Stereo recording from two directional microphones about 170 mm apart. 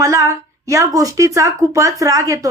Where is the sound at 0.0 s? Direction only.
20° right (ahead or behind).